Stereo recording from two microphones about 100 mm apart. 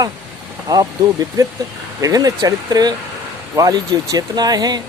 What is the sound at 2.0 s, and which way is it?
Speech, 40° right (ahead or behind).